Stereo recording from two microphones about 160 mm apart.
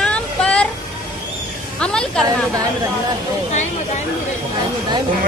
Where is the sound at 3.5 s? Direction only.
45° left (ahead or behind).